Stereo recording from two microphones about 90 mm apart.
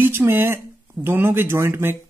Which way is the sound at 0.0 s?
25° right (ahead or behind).